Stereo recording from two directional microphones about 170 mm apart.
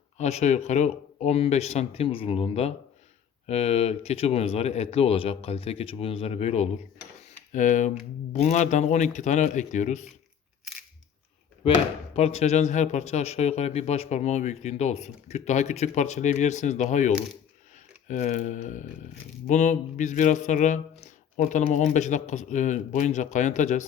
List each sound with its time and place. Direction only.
0.2 s a man's voice: 40° left (ahead or behind)
11.6 s speech: 35° left (ahead or behind)
18.1 s a man's voice: 45° left (ahead or behind)